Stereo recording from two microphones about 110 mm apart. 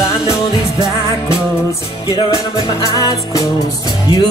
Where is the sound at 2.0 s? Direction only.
35° left (ahead or behind).